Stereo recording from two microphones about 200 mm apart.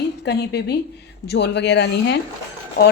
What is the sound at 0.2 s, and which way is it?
A woman's voice, 60° left (ahead or behind).